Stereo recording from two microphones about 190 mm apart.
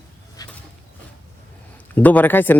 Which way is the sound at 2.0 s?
10° left (ahead or behind).